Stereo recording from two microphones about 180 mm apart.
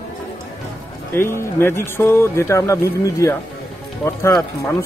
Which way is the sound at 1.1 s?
15° left (ahead or behind).